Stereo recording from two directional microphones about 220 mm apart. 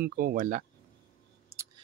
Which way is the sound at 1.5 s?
10° right (ahead or behind).